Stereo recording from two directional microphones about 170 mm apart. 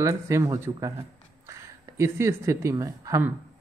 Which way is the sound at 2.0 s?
15° right (ahead or behind).